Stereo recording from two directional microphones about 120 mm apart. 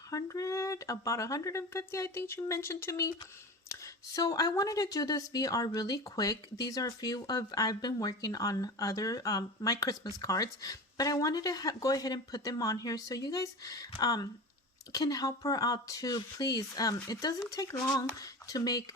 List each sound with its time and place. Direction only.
0.1 s speech: 30° left (ahead or behind)